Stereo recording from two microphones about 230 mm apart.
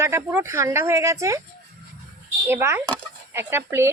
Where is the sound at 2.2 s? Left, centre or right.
Centre.